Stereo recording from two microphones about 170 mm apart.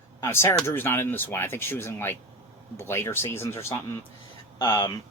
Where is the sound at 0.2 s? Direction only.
15° left (ahead or behind).